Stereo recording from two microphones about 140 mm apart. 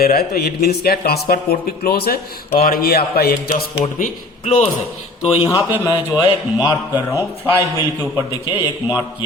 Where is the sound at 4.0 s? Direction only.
55° left (ahead or behind).